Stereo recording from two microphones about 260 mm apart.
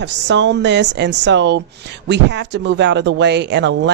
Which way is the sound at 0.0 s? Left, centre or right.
Right.